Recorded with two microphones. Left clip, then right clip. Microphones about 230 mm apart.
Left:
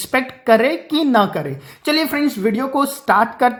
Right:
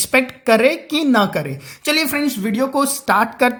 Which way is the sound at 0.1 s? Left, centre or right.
Right.